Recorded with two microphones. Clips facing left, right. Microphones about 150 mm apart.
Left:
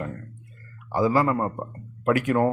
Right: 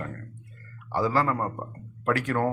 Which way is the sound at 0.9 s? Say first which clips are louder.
Left 4 dB; 10° left (ahead or behind).